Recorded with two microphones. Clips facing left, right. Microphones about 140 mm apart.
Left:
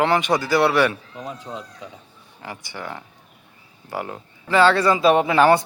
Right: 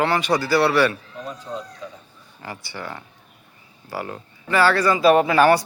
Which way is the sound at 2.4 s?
15° left (ahead or behind).